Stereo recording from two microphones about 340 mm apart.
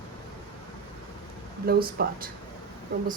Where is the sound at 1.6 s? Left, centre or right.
Right.